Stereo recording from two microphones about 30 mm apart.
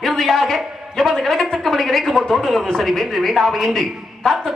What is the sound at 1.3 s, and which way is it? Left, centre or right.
A man's voice, centre.